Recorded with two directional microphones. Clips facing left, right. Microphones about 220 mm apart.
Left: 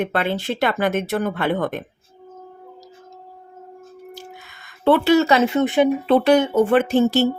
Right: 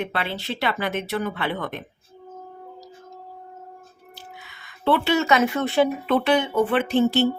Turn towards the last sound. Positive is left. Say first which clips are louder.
# left 2 dB
turn(degrees=40)  # may be behind; listen again after turning